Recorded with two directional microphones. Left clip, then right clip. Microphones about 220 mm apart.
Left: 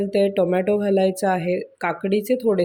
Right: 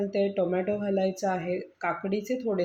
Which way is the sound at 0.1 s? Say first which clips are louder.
Left 10 dB; 50° left (ahead or behind).